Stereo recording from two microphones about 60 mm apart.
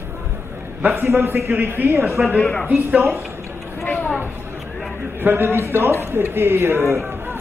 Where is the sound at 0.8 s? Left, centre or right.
Right.